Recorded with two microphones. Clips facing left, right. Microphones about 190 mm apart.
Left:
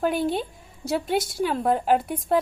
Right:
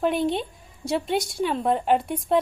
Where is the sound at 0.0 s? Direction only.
Centre (ahead or behind).